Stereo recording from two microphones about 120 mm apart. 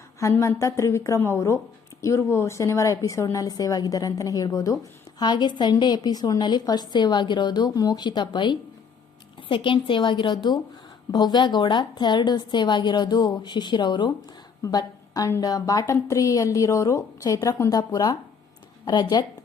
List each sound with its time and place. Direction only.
0.2 s a woman's voice: 25° left (ahead or behind)